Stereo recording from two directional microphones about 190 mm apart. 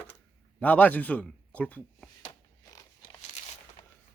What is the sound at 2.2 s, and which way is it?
Zipper, 25° left (ahead or behind).